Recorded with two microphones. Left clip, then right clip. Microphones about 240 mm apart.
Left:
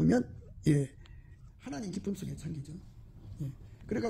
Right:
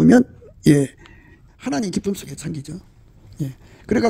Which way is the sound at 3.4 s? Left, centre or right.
Right.